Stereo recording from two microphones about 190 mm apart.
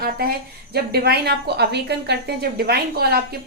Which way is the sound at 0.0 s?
55° right (ahead or behind).